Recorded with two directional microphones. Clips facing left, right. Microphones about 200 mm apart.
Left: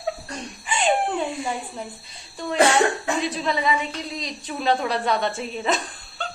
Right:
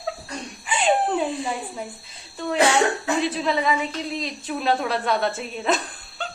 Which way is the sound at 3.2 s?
Centre (ahead or behind).